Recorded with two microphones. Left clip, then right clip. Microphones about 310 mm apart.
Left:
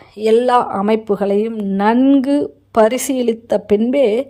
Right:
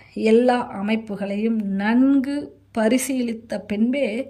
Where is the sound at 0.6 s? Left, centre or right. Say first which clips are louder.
Left 10 dB; left.